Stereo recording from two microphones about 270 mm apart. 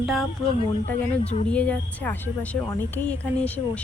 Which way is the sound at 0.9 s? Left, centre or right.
Left.